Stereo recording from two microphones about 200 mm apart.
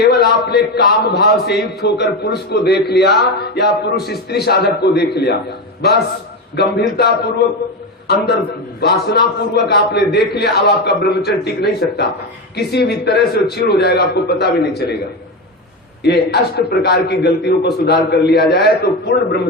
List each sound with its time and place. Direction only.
0.0 s a man's voice: 55° left (ahead or behind)
6.6 s a man's voice: 55° left (ahead or behind)
16.0 s a man's voice: 55° left (ahead or behind)